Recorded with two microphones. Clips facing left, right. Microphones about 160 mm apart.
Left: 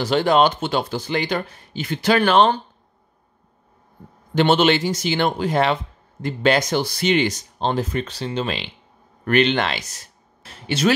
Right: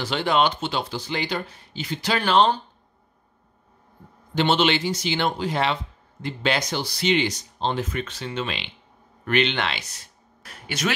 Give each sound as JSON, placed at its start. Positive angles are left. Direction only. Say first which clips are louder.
{"t": 0.0, "sound": "speech", "louder": "left 5 dB", "side_deg": 45}
{"t": 4.4, "sound": "speech", "louder": "left 4 dB", "side_deg": 50}
{"t": 7.9, "sound": "speech", "louder": "left 5 dB", "side_deg": 35}
{"t": 10.4, "sound": "speech", "louder": "left 6 dB", "side_deg": 30}